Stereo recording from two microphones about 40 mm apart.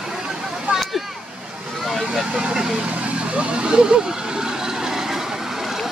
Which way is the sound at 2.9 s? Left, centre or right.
Right.